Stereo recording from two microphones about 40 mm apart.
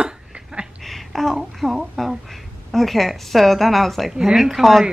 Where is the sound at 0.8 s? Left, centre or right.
Centre.